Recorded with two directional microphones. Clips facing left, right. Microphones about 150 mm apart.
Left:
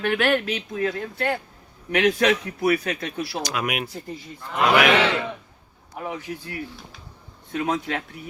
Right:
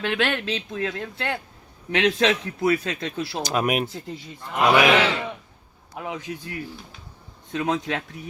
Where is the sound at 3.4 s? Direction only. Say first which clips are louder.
Right 5 dB; 35° right (ahead or behind).